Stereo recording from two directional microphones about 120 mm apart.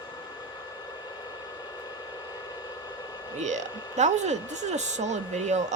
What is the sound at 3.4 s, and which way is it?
A woman's voice, 80° right.